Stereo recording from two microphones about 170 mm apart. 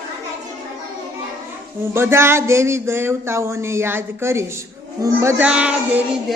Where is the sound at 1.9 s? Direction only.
15° right (ahead or behind).